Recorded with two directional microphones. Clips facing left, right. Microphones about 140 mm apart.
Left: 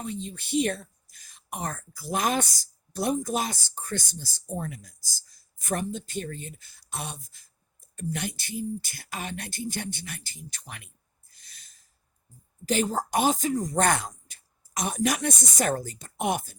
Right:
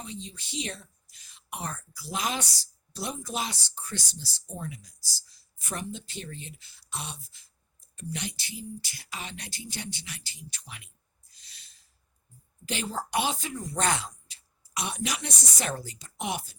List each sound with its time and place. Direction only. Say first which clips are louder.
0.0 s speech: left 6 dB; 50° left (ahead or behind)
11.3 s a sound: left 2 dB; 50° left (ahead or behind)
12.6 s speech: left 7 dB; 45° left (ahead or behind)